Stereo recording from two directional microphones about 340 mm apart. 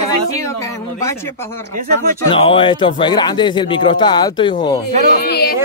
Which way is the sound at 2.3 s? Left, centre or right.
Centre.